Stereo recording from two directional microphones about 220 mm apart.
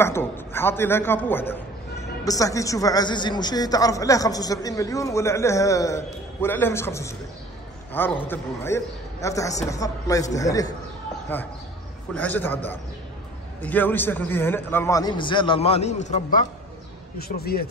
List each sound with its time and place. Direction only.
0.0 s a man's voice: 10° left (ahead or behind)
13.6 s a man's voice: 10° left (ahead or behind); by 17.6 s 45° left (ahead or behind)